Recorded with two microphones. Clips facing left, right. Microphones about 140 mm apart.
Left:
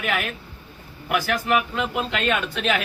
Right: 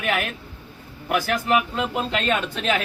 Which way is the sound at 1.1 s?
30° right (ahead or behind).